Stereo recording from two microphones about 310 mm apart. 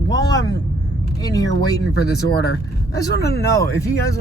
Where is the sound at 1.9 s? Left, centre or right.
Left.